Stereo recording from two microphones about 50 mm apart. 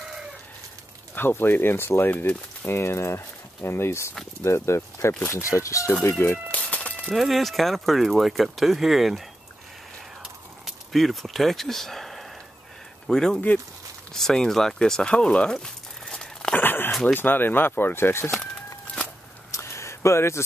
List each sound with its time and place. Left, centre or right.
1.1 s speech: left
2.8 s speech: left
5.3 s speech: left
6.2 s speech: left
6.5 s a sound: left
7.1 s speech: centre
10.6 s speech: centre; by 15.5 s left
15.5 s dog: centre
16.5 s dog: left
17.1 s speech: left
19.5 s a sound: left